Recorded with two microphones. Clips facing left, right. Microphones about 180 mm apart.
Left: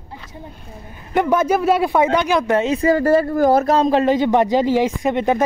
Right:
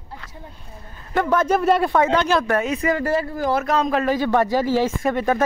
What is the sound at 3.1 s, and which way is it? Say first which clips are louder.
Speech: left 7 dB; 50° left (ahead or behind).